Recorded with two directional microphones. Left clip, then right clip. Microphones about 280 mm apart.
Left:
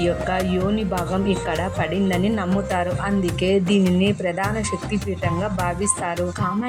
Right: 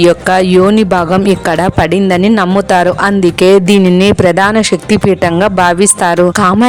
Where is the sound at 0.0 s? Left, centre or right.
Right.